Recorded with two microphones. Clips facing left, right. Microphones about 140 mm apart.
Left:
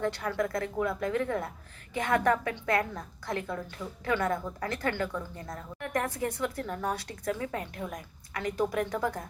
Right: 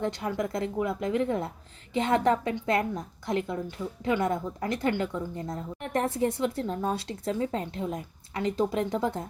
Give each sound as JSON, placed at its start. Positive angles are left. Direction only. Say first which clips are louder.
{"t": 0.0, "sound": "a woman's voice", "louder": "right 1 dB", "side_deg": -20}